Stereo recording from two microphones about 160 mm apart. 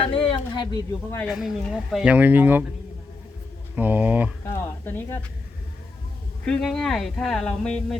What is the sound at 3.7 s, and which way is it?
Speech, 10° right (ahead or behind).